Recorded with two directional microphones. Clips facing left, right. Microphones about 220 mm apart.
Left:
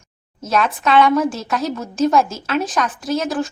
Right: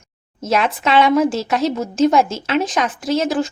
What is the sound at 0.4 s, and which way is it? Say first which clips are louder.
A woman's voice: right 1 dB; 25° right (ahead or behind).